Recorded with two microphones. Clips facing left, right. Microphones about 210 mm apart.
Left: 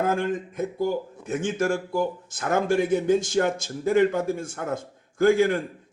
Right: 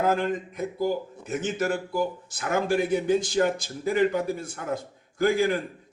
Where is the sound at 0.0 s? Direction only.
50° left (ahead or behind).